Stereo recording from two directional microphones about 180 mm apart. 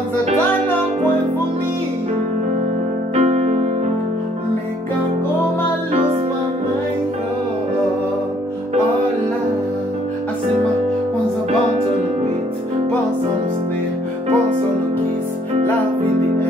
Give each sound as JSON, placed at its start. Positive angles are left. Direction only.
{"t": 3.2, "sound": "music", "side_deg": -35}